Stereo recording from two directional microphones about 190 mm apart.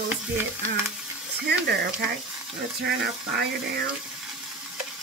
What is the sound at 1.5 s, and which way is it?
Speech, 65° right (ahead or behind).